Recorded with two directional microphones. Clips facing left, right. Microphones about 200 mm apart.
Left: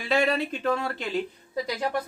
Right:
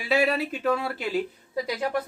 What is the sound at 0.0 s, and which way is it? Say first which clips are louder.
Speech: right 1 dB; 5° right (ahead or behind).